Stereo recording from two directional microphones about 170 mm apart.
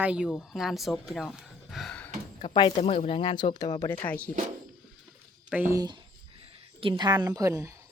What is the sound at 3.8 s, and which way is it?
Speech, 15° left (ahead or behind).